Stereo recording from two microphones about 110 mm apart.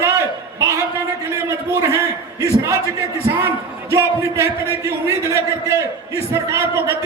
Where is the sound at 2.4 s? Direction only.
30° right (ahead or behind).